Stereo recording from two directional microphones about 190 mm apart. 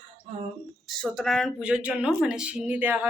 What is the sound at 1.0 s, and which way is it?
Speech, centre (ahead or behind).